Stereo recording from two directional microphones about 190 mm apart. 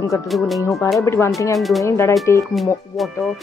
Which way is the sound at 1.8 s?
15° left (ahead or behind).